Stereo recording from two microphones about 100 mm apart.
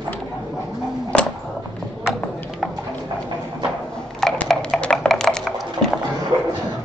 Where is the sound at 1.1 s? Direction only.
10° left (ahead or behind).